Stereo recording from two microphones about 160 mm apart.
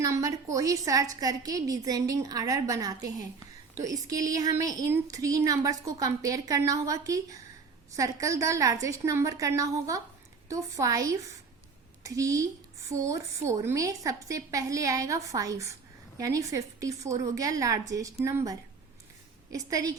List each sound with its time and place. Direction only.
0.0 s a woman's voice: 20° right (ahead or behind)